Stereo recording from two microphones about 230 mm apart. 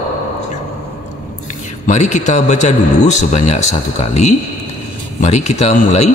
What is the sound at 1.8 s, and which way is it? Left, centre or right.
A man's voice, left.